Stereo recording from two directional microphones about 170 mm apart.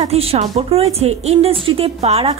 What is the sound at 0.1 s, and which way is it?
Speech, 35° right (ahead or behind).